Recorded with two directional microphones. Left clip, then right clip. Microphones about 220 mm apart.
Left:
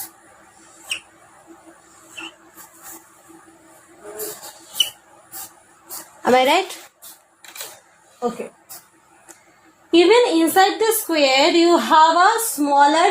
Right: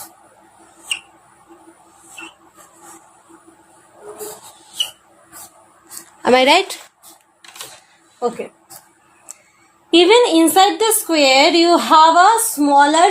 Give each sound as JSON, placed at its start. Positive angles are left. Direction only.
{"t": 6.2, "sound": "speech", "side_deg": -40}
{"t": 9.9, "sound": "speech", "side_deg": -40}